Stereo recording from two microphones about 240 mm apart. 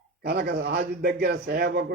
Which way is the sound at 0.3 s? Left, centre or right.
Right.